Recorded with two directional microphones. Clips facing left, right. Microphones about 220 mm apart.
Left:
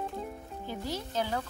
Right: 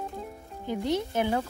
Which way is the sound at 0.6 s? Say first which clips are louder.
Right 9 dB; 20° right (ahead or behind).